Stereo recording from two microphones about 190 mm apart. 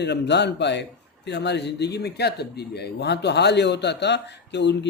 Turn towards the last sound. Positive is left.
turn(degrees=65)  # may be behind; listen again after turning